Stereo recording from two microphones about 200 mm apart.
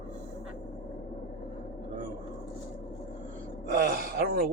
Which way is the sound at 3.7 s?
50° right (ahead or behind).